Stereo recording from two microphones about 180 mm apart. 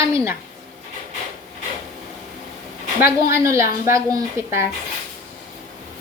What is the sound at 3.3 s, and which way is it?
A woman's voice, 15° right (ahead or behind).